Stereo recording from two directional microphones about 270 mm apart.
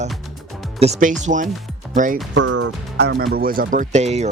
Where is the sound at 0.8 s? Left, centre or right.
Right.